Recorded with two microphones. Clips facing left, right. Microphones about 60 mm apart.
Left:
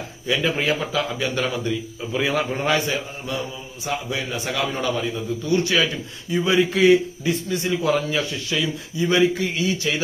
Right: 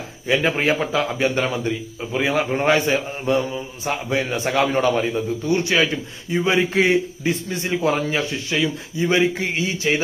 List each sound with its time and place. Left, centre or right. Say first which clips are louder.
0.3 s a man's voice: right 3 dB; right
5.5 s a man's voice: right 1 dB; right